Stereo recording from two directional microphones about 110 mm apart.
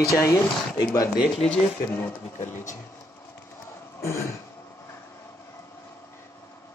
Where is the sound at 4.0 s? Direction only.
25° left (ahead or behind).